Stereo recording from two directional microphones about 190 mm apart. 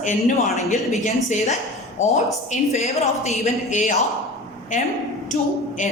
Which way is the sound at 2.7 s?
35° left (ahead or behind).